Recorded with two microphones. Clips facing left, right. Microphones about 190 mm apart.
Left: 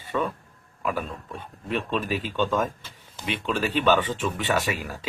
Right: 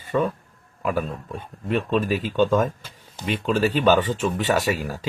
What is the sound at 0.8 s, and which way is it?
A man's voice, 45° right (ahead or behind).